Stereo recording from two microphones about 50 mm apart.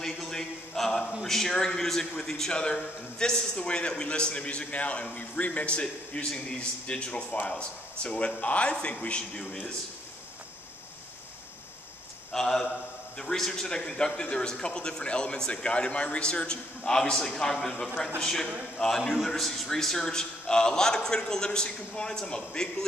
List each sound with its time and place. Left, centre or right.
0.0 s a sound: centre
1.2 s a man's voice: centre
12.3 s speech: centre